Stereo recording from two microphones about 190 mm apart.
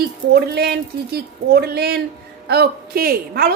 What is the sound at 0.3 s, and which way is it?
Speech, 55° right (ahead or behind).